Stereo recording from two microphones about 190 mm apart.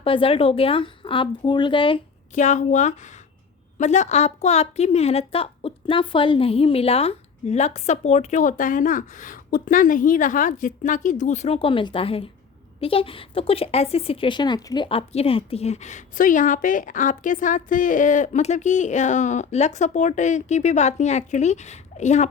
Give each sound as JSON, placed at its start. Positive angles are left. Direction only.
{"t": 0.0, "sound": "speech", "side_deg": 30}
{"t": 2.3, "sound": "speech", "side_deg": 40}